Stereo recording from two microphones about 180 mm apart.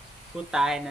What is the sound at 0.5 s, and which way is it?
Speech, 5° right (ahead or behind).